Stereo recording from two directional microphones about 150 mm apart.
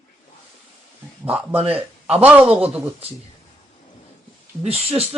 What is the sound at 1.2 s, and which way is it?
Speech, 10° right (ahead or behind).